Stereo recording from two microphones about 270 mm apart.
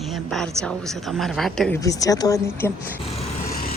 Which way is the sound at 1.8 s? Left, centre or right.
Centre.